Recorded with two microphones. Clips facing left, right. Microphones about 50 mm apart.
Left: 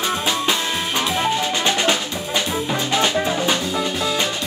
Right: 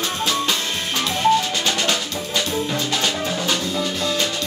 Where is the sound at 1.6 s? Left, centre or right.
Left.